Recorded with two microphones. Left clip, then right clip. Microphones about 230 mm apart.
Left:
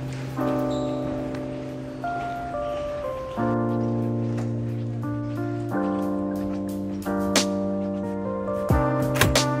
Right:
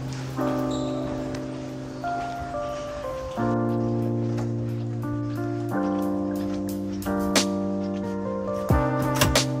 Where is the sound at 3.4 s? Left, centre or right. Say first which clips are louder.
Even; centre.